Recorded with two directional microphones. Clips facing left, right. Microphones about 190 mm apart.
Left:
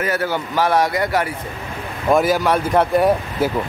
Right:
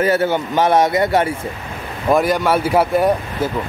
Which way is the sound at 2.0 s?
Centre (ahead or behind).